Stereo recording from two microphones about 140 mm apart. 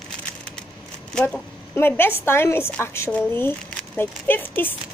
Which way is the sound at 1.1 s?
10° left (ahead or behind).